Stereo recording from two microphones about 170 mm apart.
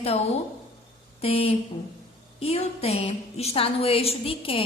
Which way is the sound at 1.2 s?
35° left (ahead or behind).